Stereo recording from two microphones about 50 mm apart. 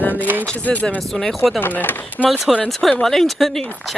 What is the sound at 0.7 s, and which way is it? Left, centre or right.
Speech, left.